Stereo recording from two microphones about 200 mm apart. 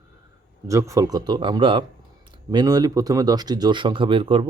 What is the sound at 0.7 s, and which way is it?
Speech, 15° right (ahead or behind).